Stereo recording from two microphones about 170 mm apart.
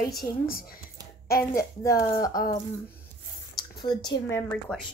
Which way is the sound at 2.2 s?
20° left (ahead or behind).